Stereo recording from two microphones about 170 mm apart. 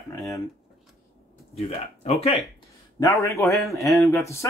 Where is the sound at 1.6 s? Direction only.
35° left (ahead or behind).